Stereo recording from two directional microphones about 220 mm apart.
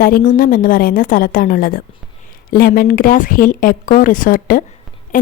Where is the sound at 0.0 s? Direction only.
40° left (ahead or behind).